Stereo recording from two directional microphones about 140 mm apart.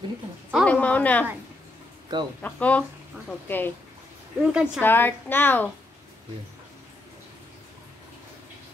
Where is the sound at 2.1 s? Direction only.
30° right (ahead or behind).